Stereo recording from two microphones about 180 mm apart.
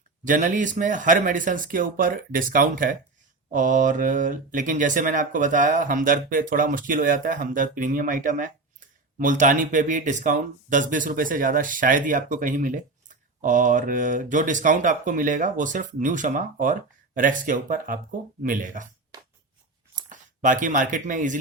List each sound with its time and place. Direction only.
0.3 s speech: 45° right (ahead or behind)
20.0 s speech: 45° right (ahead or behind)